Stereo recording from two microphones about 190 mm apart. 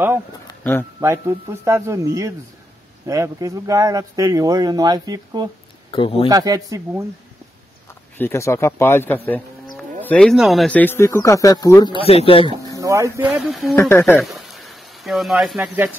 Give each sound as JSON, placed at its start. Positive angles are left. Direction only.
{"t": 0.5, "sound": "a sound", "side_deg": 10}
{"t": 1.0, "sound": "speech", "side_deg": -15}
{"t": 5.9, "sound": "speech", "side_deg": 30}
{"t": 6.2, "sound": "speech", "side_deg": -20}
{"t": 8.2, "sound": "speech", "side_deg": 15}
{"t": 12.0, "sound": "speech", "side_deg": 30}
{"t": 12.7, "sound": "speech", "side_deg": -15}
{"t": 13.4, "sound": "speech", "side_deg": 0}
{"t": 13.7, "sound": "speech", "side_deg": 10}
{"t": 14.3, "sound": "a sound", "side_deg": 0}